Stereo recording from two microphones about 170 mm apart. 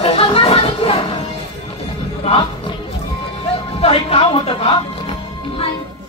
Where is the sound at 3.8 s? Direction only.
35° left (ahead or behind).